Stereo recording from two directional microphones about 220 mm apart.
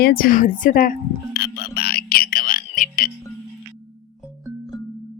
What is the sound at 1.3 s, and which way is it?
Music, 45° left (ahead or behind).